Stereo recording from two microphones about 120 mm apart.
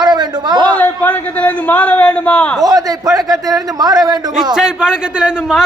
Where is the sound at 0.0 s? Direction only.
40° right (ahead or behind).